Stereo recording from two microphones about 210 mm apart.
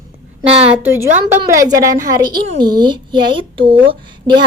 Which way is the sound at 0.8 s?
10° right (ahead or behind).